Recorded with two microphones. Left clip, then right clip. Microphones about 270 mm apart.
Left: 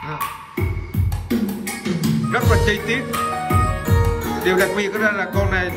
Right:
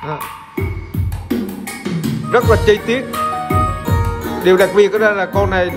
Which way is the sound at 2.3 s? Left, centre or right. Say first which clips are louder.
Right 8 dB; centre.